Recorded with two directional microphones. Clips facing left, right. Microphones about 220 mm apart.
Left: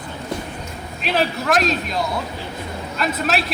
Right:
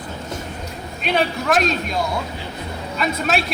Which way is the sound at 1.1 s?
Centre (ahead or behind).